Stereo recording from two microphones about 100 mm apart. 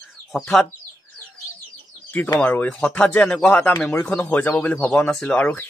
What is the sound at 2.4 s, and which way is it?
Speech, 15° left (ahead or behind).